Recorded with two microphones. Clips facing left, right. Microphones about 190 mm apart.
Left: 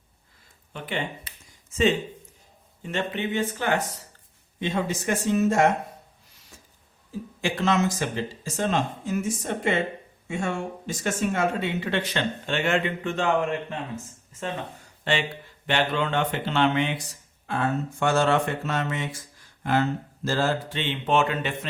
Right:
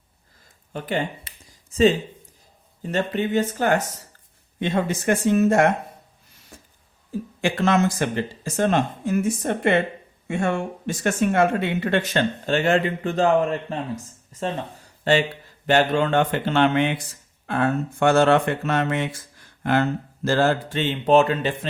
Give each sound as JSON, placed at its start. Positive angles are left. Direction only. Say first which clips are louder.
{"t": 0.7, "sound": "speech", "louder": "right 5 dB", "side_deg": -40}
{"t": 4.6, "sound": "speech", "louder": "right 4 dB", "side_deg": -55}
{"t": 6.5, "sound": "a sound", "louder": "right 5 dB", "side_deg": -55}
{"t": 7.4, "sound": "speech", "louder": "right 3 dB", "side_deg": -55}
{"t": 20.7, "sound": "speech", "louder": "right 8 dB", "side_deg": -40}